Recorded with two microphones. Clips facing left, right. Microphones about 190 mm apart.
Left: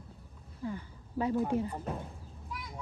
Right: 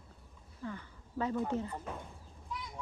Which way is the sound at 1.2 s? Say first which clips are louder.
Left 4 dB; 15° left (ahead or behind).